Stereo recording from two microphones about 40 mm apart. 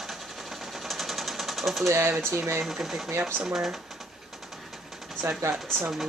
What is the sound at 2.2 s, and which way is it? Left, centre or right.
Speech, right.